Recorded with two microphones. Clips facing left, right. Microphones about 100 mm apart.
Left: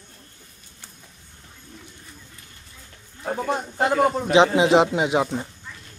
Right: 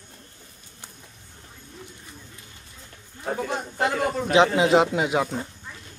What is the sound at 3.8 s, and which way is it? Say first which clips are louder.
Speech: left 4 dB; 25° left (ahead or behind).